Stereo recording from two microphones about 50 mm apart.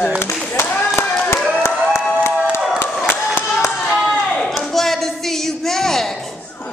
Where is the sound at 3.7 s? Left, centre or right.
Centre.